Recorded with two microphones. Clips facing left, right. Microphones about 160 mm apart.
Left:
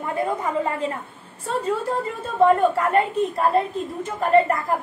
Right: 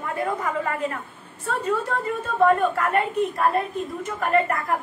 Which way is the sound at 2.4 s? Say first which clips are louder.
Left 3 dB; 30° left (ahead or behind).